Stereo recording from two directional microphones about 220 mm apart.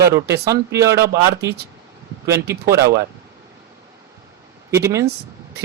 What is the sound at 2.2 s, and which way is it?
Speech, 15° right (ahead or behind).